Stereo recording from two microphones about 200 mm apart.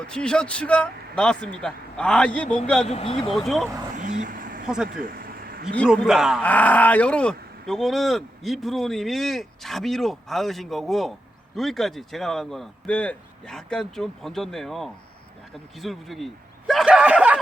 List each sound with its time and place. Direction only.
0.0 s speech: 5° left (ahead or behind)
2.8 s speech: 30° left (ahead or behind)
3.3 s speech: centre (ahead or behind)
3.9 s vehicle: 40° right (ahead or behind)
4.6 s speech: 5° right (ahead or behind)
4.9 s a sound: 50° right (ahead or behind)
5.9 s speech: 5° right (ahead or behind)
6.4 s speech: 10° left (ahead or behind)